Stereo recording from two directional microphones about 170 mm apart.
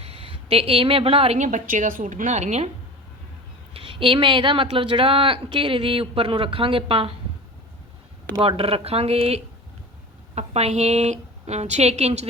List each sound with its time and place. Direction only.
0.0 s speech: 35° right (ahead or behind)
3.8 s speech: 30° right (ahead or behind)
8.4 s speech: 35° right (ahead or behind)